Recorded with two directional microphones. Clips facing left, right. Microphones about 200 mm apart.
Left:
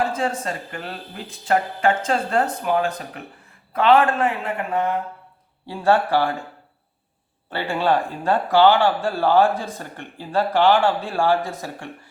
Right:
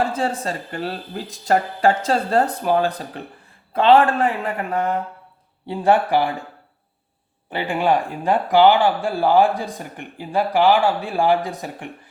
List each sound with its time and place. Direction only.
0.0 s a man's voice: 30° right (ahead or behind)
5.6 s speech: 20° right (ahead or behind)
7.5 s speech: 15° right (ahead or behind)